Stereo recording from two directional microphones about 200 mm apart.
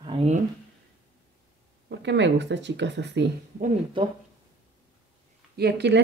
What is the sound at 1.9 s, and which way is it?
Speech, 60° right (ahead or behind).